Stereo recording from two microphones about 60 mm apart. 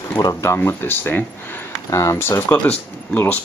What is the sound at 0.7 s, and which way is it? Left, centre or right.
Speech, left.